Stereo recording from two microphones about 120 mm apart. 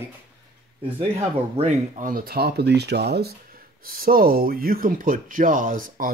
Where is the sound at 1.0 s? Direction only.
65° right (ahead or behind); by 2.1 s 85° right.